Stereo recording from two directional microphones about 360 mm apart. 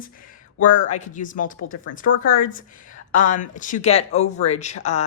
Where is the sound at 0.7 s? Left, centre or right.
Centre.